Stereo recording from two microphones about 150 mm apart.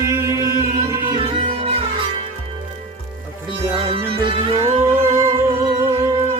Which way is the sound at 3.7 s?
35° right (ahead or behind).